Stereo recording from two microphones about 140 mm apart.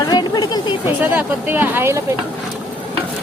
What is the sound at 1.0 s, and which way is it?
Speech, 10° right (ahead or behind).